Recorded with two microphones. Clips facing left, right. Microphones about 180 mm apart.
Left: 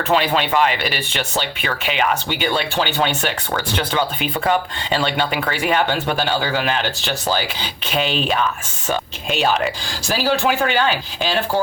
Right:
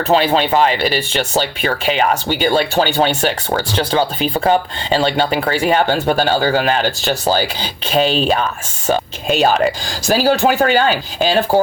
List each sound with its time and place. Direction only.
0.1 s speech: 30° right (ahead or behind)